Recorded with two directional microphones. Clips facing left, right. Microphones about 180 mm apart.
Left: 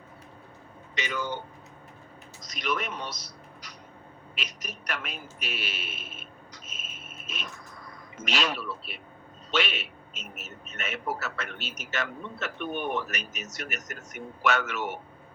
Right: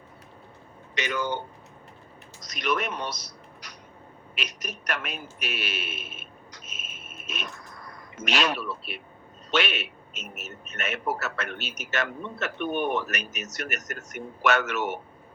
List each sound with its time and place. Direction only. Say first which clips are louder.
0.9 s speech: right 4 dB; 70° right (ahead or behind)
2.5 s a man's voice: right 3 dB; 70° right (ahead or behind)
4.4 s a man's voice: right 4 dB; 75° right (ahead or behind)
7.3 s a sound: right 4 dB; 70° right (ahead or behind)
8.1 s a man's voice: right 3 dB; 70° right (ahead or behind)